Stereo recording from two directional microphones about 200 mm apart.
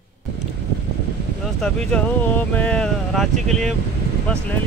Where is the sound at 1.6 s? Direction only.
5° left (ahead or behind).